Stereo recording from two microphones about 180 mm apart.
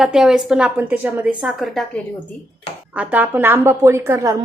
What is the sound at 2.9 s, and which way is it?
A woman's voice, 10° right (ahead or behind).